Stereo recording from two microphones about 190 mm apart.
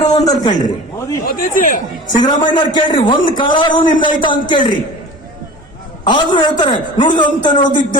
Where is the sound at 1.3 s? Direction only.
45° left (ahead or behind).